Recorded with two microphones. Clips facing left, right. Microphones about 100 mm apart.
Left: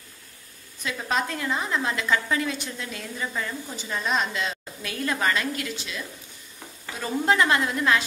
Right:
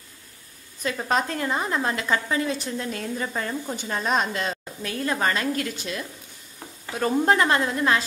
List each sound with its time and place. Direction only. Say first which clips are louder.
0.8 s a woman's voice: right 3 dB; 40° right (ahead or behind)
4.9 s a woman's voice: right 1 dB; 30° right (ahead or behind)